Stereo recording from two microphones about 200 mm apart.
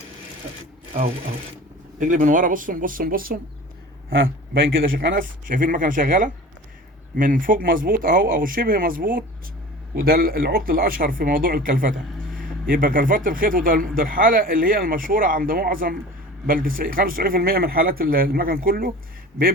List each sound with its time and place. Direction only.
2.0 s speech: 40° right (ahead or behind)
4.1 s a man's voice: 75° right (ahead or behind)
4.9 s speech: 45° right (ahead or behind)